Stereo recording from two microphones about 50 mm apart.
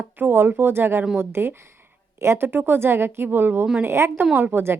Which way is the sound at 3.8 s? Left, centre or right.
Right.